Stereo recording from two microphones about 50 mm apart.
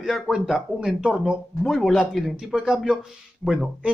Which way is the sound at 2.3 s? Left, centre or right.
Centre.